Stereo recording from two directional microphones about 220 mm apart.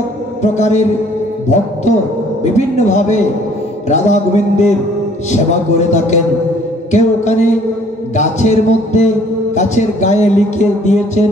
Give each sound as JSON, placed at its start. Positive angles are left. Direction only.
{"t": 0.4, "sound": "music", "side_deg": 30}
{"t": 2.4, "sound": "music", "side_deg": 30}